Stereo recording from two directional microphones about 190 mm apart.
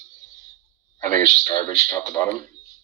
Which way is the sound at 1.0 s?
45° right (ahead or behind).